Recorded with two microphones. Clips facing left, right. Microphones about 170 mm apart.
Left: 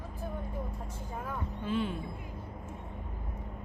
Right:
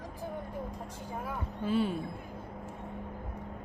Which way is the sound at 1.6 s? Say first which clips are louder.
Right 3 dB; 40° right (ahead or behind).